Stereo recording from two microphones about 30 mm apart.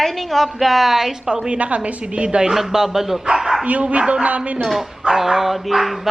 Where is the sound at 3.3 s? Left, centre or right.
Centre.